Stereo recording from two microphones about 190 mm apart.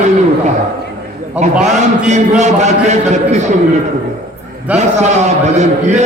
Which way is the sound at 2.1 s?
40° right (ahead or behind).